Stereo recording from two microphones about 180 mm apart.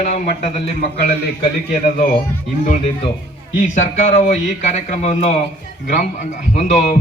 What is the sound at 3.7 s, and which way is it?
A man's voice, 45° left (ahead or behind).